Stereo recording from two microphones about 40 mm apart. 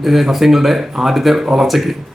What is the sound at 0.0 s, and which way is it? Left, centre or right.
Speech, centre.